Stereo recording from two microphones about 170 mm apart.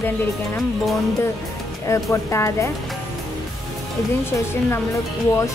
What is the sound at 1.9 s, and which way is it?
Speech, 15° left (ahead or behind).